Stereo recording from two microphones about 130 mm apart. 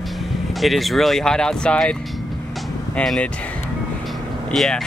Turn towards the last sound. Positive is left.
turn(degrees=5)  # may be behind; listen again after turning